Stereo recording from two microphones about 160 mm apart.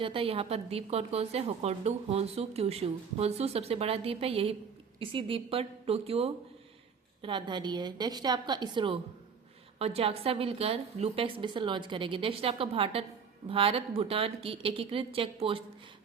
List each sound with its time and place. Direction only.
0.0 s a woman's voice: 35° right (ahead or behind)